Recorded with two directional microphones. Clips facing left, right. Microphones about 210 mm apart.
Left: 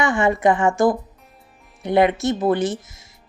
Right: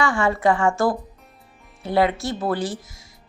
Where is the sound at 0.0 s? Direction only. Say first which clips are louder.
Left 2 dB; 20° left (ahead or behind).